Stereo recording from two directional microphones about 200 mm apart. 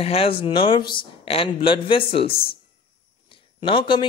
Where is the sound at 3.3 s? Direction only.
25° left (ahead or behind).